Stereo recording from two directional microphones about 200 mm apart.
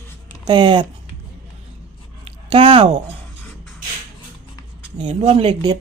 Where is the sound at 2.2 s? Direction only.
25° right (ahead or behind).